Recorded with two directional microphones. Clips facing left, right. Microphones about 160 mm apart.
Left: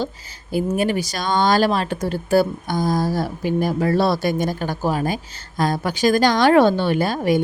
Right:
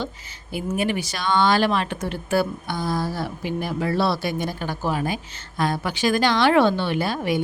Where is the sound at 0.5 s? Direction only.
40° left (ahead or behind).